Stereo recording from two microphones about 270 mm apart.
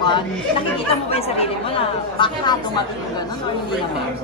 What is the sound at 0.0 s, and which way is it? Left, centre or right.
Speech, centre.